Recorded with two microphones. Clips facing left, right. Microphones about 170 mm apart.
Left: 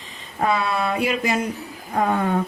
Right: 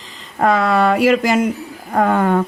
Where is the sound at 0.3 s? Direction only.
90° right.